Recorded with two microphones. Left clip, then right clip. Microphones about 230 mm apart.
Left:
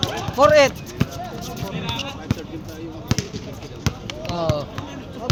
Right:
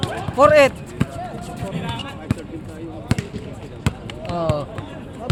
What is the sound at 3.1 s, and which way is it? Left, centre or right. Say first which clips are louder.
Basketball bounce: even; centre.